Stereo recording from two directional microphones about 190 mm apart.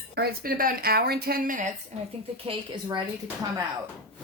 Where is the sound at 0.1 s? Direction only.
55° right (ahead or behind).